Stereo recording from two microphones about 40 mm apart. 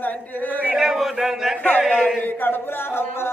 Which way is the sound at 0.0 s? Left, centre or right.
Left.